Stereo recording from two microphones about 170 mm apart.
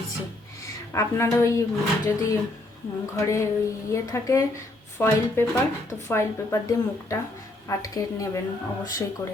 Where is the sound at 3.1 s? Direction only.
15° left (ahead or behind).